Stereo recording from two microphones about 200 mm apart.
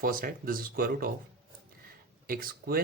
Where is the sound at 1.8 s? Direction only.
45° right (ahead or behind).